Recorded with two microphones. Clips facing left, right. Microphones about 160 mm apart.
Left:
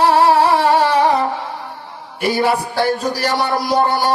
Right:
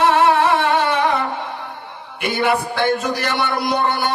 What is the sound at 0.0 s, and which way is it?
Music, 35° left (ahead or behind).